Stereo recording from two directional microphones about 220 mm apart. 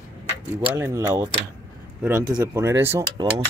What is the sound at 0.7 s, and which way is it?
Speech, 10° right (ahead or behind).